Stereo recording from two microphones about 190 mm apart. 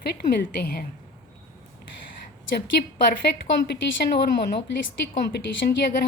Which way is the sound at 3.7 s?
60° left (ahead or behind).